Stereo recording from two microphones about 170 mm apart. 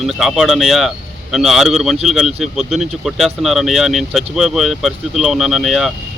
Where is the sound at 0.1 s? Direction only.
Centre (ahead or behind).